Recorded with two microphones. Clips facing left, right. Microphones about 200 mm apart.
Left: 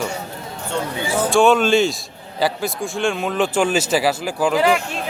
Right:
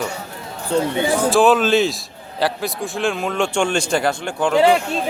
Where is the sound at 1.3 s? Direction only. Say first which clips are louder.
Left 1 dB; centre (ahead or behind).